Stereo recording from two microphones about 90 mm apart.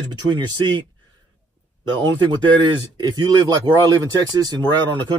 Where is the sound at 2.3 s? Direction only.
55° right (ahead or behind).